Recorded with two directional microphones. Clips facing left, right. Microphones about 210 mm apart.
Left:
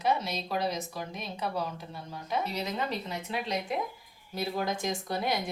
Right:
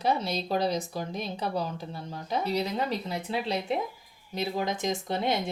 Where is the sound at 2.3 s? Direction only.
35° right (ahead or behind).